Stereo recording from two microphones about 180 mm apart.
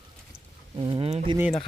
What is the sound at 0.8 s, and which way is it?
Speech, 30° right (ahead or behind).